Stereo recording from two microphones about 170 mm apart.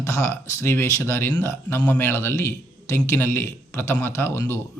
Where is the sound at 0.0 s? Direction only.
15° left (ahead or behind).